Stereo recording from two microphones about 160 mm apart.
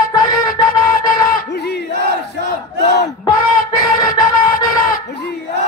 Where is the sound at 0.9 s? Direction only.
75° left (ahead or behind); by 1.8 s 90° left.